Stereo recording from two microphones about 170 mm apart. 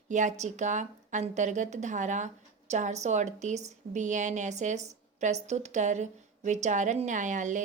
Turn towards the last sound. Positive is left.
turn(degrees=-45)  # may be behind; listen again after turning